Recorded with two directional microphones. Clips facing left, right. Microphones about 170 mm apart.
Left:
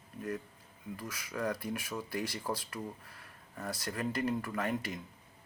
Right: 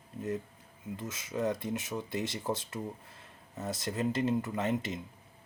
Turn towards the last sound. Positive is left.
turn(degrees=-20)  # may be behind; listen again after turning